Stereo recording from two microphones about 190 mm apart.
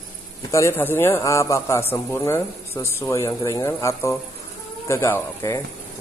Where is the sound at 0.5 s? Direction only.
15° left (ahead or behind).